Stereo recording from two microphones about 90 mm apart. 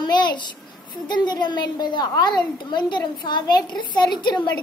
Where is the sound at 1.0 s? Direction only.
55° left (ahead or behind).